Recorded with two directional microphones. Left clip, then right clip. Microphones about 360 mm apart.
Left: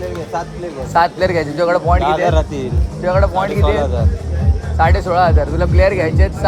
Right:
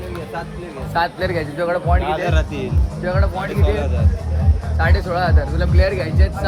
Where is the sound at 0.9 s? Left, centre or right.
Left.